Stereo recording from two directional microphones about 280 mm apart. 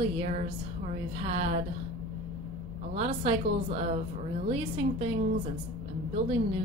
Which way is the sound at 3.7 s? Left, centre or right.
Right.